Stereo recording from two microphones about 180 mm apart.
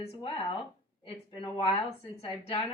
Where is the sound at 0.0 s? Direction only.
30° left (ahead or behind).